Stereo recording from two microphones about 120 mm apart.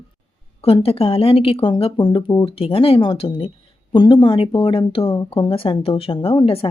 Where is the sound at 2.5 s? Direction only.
50° left (ahead or behind).